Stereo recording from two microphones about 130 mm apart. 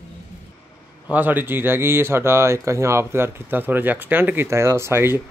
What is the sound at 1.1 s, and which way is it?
A man's voice, 15° right (ahead or behind).